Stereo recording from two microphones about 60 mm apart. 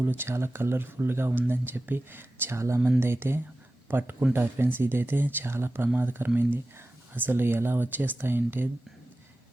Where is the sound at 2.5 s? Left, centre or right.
Right.